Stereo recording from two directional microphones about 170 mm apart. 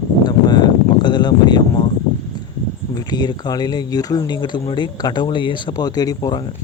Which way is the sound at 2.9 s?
25° left (ahead or behind).